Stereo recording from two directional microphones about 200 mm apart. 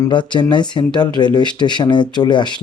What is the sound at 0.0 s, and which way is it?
Speech, 20° left (ahead or behind).